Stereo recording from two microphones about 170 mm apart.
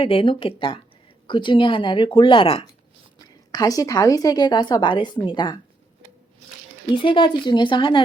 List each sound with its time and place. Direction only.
0.0 s a woman's voice: 30° left (ahead or behind)
3.2 s a woman's voice: 20° left (ahead or behind)
6.9 s a woman's voice: 30° left (ahead or behind)